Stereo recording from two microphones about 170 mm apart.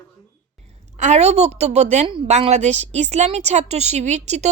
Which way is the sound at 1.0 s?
40° right (ahead or behind).